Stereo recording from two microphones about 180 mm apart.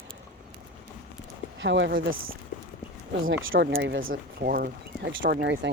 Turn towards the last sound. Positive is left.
turn(degrees=-70)  # may be behind; listen again after turning